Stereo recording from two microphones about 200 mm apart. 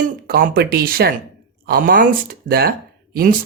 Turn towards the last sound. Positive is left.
turn(degrees=-45)  # may be behind; listen again after turning